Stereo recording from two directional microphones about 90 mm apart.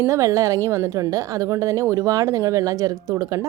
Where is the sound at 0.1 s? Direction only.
40° right (ahead or behind).